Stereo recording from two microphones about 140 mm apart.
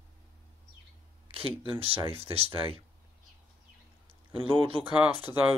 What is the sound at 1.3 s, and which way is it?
Speech, 40° right (ahead or behind).